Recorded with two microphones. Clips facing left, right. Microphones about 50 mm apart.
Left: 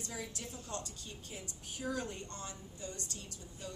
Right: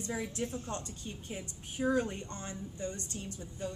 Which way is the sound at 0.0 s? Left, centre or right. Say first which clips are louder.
Right 8 dB; right.